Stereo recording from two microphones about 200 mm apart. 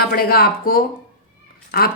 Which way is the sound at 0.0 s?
50° left (ahead or behind).